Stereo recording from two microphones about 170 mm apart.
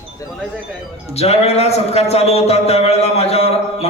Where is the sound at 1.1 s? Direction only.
40° left (ahead or behind).